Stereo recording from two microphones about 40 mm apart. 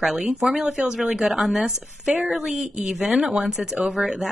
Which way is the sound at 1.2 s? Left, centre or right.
Centre.